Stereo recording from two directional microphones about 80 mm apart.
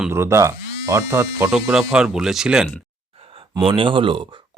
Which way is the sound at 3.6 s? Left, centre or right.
Right.